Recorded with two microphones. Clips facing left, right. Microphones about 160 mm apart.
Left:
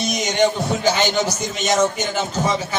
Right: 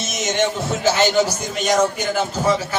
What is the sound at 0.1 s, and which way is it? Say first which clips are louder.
A man's voice: left 1 dB; centre (ahead or behind).